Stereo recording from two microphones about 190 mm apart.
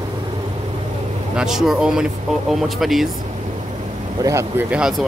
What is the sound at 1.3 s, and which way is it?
Speech, 5° right (ahead or behind).